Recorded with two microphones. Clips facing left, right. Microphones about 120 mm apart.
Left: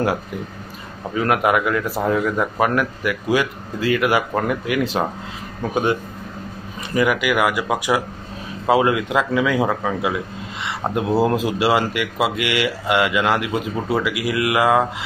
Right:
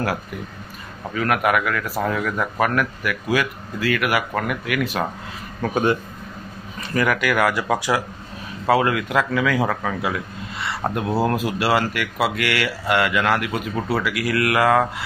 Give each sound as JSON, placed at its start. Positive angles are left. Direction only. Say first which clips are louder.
{"t": 1.1, "sound": "speech", "louder": "left 2 dB", "side_deg": 25}
{"t": 5.6, "sound": "speech", "louder": "even", "side_deg": 15}